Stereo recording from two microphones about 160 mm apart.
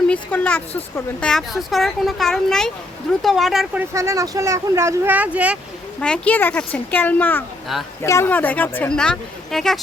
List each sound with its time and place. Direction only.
0.1 s speech: 10° left (ahead or behind)
3.8 s speech: 20° right (ahead or behind)
6.0 s speech: 10° left (ahead or behind)